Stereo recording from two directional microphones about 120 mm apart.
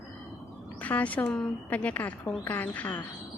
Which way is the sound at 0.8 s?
10° left (ahead or behind).